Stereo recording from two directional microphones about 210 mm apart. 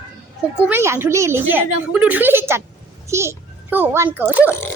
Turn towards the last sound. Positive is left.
turn(degrees=-10)  # may be behind; listen again after turning